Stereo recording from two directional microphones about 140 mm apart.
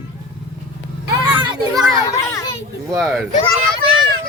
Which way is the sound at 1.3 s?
35° right (ahead or behind).